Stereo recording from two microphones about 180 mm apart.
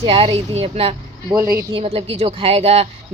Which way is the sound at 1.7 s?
35° right (ahead or behind).